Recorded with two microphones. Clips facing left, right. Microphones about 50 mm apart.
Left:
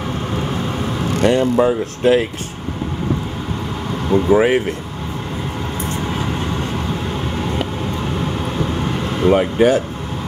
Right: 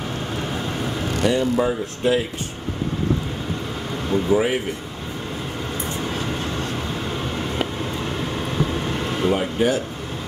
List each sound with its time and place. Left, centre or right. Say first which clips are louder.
1.2 s speech: left 5 dB; left
4.3 s speech: left 6 dB; left
6.0 s vehicle: left 4 dB; centre
8.8 s vehicle: left 4 dB; centre
9.3 s speech: left 8 dB; left